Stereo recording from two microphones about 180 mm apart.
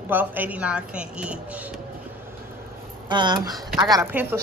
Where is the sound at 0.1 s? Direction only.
10° right (ahead or behind).